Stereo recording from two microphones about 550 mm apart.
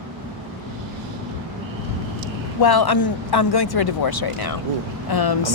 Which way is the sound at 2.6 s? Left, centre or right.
Left.